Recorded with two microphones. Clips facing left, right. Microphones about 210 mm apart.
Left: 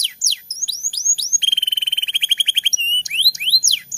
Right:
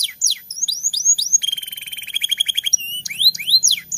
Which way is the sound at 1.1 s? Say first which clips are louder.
Left 6 dB; 25° left (ahead or behind).